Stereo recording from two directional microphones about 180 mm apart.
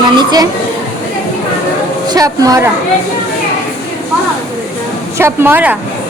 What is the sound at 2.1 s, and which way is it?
Speech, 20° right (ahead or behind).